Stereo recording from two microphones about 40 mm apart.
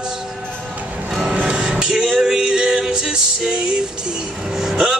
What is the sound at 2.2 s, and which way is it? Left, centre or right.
Music, centre.